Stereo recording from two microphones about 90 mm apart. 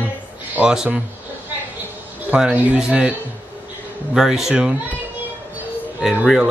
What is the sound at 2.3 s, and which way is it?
Speech, 15° right (ahead or behind).